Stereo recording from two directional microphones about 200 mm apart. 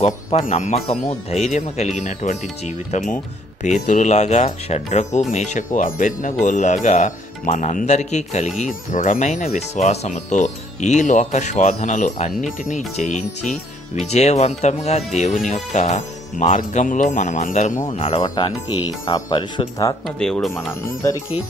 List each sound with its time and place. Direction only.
0.0 s speech: 30° left (ahead or behind)
20.1 s speech: 5° left (ahead or behind)